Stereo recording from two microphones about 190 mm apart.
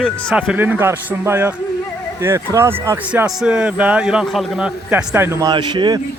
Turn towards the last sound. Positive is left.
turn(degrees=-25)  # may be behind; listen again after turning